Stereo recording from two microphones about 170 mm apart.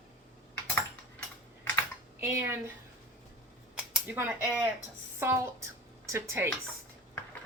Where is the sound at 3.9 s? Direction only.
10° right (ahead or behind).